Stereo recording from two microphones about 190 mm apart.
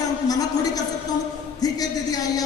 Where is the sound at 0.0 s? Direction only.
20° left (ahead or behind).